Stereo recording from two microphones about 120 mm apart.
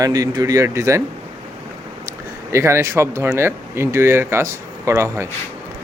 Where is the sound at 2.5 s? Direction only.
20° right (ahead or behind).